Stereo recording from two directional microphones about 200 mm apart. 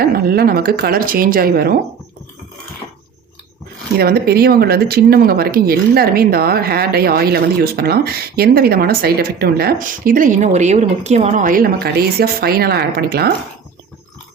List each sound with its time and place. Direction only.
0.0 s speech: 50° right (ahead or behind)
3.9 s speech: 50° right (ahead or behind)